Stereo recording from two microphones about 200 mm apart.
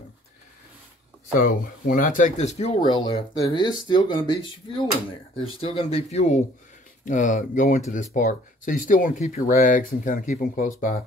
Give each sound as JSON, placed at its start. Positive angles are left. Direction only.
{"t": 1.3, "sound": "speech", "side_deg": 45}